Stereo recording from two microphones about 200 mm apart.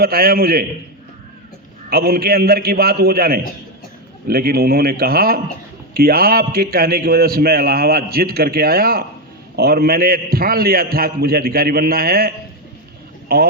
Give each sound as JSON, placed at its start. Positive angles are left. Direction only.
{"t": 0.0, "sound": "a man's voice", "side_deg": -50}
{"t": 1.9, "sound": "a man's voice", "side_deg": -50}